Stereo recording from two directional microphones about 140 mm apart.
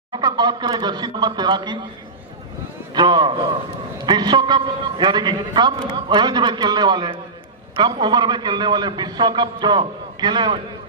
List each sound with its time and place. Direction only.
0.1 s a man's voice: 30° right (ahead or behind)
2.9 s a man's voice: 30° right (ahead or behind)